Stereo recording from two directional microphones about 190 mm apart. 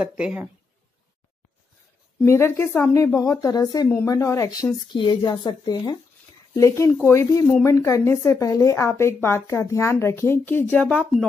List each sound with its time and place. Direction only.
0.0 s speech: 5° right (ahead or behind)
2.2 s a woman's voice: 15° left (ahead or behind)